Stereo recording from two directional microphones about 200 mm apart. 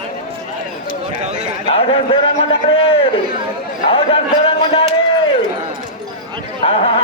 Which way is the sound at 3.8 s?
30° left (ahead or behind).